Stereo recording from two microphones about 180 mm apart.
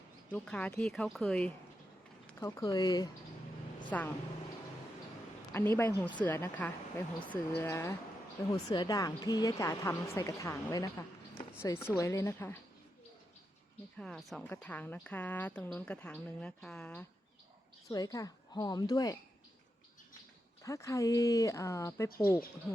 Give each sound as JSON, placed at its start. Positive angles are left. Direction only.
{"t": 0.3, "sound": "speech", "side_deg": 10}
{"t": 2.4, "sound": "a woman's voice", "side_deg": 20}
{"t": 3.8, "sound": "a woman's voice", "side_deg": 10}
{"t": 5.5, "sound": "a woman's voice", "side_deg": 10}
{"t": 14.0, "sound": "a woman's voice", "side_deg": 0}
{"t": 17.9, "sound": "a woman's voice", "side_deg": 20}
{"t": 20.7, "sound": "a woman's voice", "side_deg": 15}